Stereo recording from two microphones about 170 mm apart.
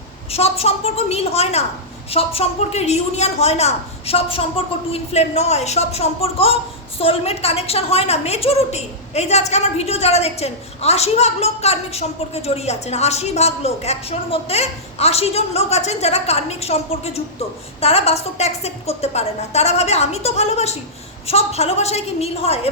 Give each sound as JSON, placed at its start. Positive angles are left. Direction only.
{"t": 0.3, "sound": "a woman's voice", "side_deg": 35}